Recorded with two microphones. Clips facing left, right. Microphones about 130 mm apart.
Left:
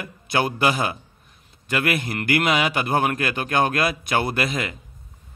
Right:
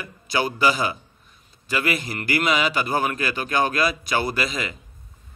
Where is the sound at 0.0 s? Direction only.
55° left (ahead or behind).